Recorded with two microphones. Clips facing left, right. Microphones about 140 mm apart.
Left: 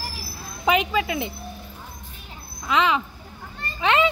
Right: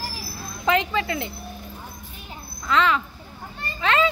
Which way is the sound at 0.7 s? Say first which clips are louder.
Left 1 dB; 15° left (ahead or behind).